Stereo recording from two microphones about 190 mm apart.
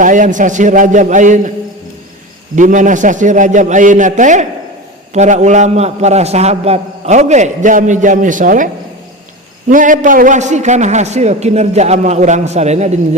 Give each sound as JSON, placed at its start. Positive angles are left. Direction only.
{"t": 0.0, "sound": "a man's voice", "side_deg": -45}
{"t": 2.6, "sound": "a man's voice", "side_deg": -40}